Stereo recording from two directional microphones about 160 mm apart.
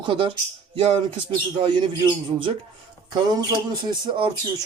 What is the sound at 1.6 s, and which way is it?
Speech, 25° right (ahead or behind).